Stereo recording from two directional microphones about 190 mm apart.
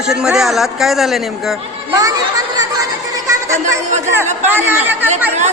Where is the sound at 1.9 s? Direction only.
20° right (ahead or behind).